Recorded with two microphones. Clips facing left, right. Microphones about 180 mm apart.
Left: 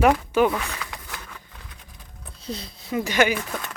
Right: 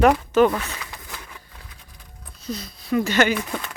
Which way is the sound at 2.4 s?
30° left (ahead or behind).